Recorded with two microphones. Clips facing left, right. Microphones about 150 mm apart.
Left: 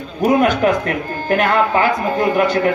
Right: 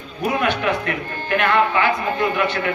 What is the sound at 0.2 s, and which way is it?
A man's voice, 40° left (ahead or behind).